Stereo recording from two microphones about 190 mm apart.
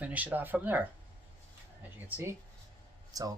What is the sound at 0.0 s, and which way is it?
Speech, 10° right (ahead or behind).